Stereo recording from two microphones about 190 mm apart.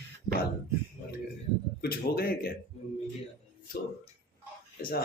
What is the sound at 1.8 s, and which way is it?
Speech, 55° left (ahead or behind).